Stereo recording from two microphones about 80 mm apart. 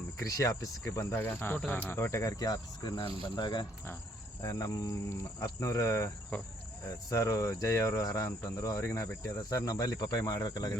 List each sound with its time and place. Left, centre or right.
0.2 s speech: left
0.9 s speech: left
2.3 s cricket: left
4.4 s speech: left
6.3 s speech: left
7.1 s speech: left